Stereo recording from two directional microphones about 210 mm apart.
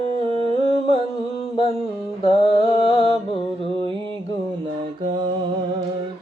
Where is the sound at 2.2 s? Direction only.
25° left (ahead or behind).